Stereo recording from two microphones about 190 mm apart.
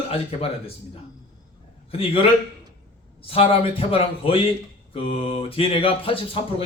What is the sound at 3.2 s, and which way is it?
Mantra, 30° left (ahead or behind).